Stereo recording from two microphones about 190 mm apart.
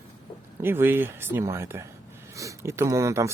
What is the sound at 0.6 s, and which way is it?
Speech, 10° right (ahead or behind).